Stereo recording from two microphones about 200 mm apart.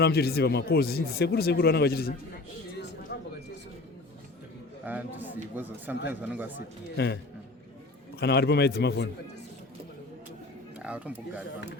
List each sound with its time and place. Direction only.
0.0 s speech: 50° left (ahead or behind)
3.1 s a sound: 55° left (ahead or behind)
4.9 s speech: 10° right (ahead or behind)
6.6 s a man's voice: 55° left (ahead or behind)
8.2 s a man's voice: 55° left (ahead or behind)
10.8 s speech: 5° right (ahead or behind)